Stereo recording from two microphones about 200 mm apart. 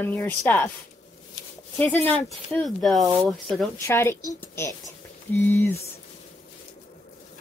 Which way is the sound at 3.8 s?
10° left (ahead or behind).